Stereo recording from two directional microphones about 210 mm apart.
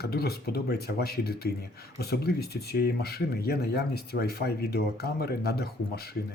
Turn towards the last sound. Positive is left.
turn(degrees=50)  # may be behind; listen again after turning